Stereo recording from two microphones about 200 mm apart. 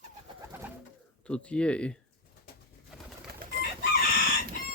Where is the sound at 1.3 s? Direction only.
5° left (ahead or behind).